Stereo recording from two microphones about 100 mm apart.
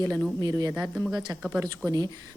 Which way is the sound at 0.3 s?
40° right (ahead or behind).